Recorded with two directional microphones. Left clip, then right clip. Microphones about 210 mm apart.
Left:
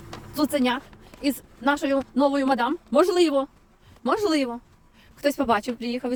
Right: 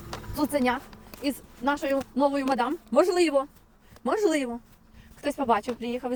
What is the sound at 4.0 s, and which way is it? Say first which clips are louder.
Speech: left 2 dB; 25° left (ahead or behind).